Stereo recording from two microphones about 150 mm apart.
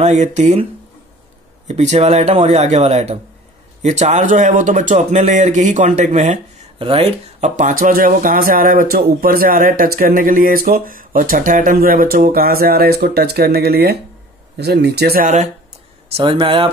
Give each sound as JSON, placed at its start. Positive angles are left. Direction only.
{"t": 0.0, "sound": "speech", "side_deg": -50}
{"t": 1.7, "sound": "speech", "side_deg": -50}
{"t": 6.8, "sound": "speech", "side_deg": -40}
{"t": 15.2, "sound": "speech", "side_deg": -50}
{"t": 16.2, "sound": "speech", "side_deg": -35}